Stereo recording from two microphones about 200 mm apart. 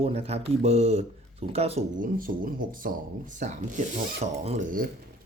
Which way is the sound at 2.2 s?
45° right (ahead or behind).